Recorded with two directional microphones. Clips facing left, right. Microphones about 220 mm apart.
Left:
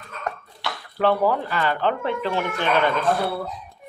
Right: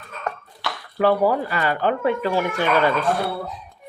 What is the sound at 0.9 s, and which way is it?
Speech, 10° right (ahead or behind).